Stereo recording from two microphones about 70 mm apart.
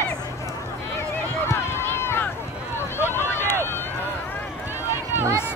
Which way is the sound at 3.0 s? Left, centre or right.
Left.